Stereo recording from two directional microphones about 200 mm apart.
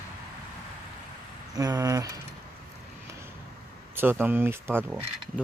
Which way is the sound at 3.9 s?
10° right (ahead or behind).